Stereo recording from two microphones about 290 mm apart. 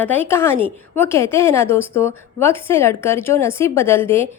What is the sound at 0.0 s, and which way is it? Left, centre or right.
A woman's voice, centre.